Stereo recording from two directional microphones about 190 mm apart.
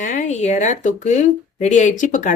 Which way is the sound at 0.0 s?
40° left (ahead or behind).